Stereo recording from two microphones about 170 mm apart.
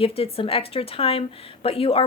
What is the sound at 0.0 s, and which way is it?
Speech, 35° left (ahead or behind).